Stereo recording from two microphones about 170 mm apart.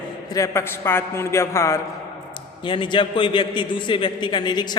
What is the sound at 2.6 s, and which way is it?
A man's voice, 30° left (ahead or behind).